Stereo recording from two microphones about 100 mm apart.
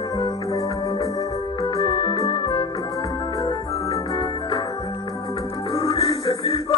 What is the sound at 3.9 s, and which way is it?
Organ, 70° left (ahead or behind).